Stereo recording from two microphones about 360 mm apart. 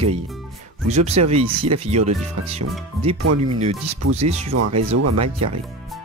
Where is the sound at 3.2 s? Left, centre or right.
Right.